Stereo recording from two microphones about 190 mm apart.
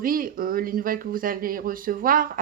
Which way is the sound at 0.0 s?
50° right (ahead or behind).